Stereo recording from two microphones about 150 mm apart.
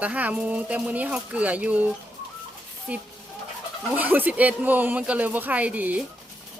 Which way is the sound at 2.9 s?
10° right (ahead or behind).